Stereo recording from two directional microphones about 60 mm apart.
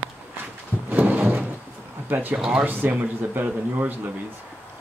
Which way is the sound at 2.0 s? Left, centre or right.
Right.